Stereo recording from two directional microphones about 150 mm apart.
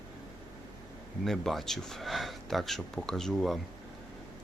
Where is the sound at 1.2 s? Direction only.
Centre (ahead or behind).